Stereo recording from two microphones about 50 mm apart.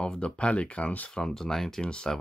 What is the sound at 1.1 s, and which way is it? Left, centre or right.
Speech, centre.